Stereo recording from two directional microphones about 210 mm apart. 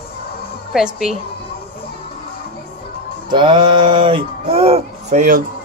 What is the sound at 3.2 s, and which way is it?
Speech, 20° right (ahead or behind).